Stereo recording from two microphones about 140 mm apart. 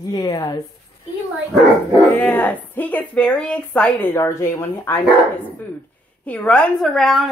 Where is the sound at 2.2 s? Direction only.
10° left (ahead or behind).